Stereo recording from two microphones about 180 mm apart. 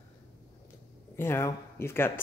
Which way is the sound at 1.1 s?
15° left (ahead or behind).